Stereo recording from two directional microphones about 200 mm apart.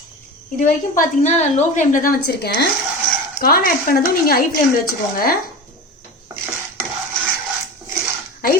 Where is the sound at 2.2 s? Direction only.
55° left (ahead or behind).